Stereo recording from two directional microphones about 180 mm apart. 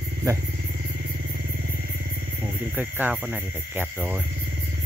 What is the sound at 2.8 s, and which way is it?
Speech, 10° right (ahead or behind).